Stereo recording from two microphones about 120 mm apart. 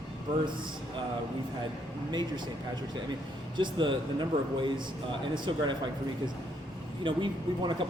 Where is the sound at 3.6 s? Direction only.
40° right (ahead or behind).